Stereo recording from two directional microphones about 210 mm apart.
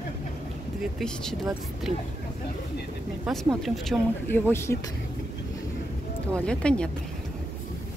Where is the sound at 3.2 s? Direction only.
Centre (ahead or behind).